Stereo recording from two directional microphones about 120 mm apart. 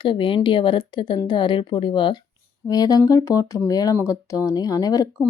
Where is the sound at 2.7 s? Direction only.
30° left (ahead or behind).